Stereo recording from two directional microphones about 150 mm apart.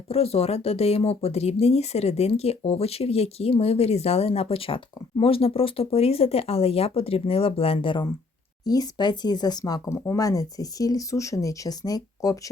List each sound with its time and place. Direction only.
0.1 s speech: 40° left (ahead or behind); by 12.4 s 25° left (ahead or behind)